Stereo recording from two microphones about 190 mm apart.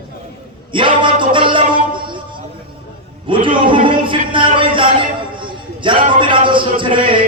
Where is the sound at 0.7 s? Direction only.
25° right (ahead or behind).